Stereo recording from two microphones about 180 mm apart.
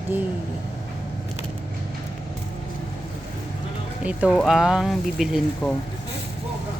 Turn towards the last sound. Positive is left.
turn(degrees=0)  # may be behind; listen again after turning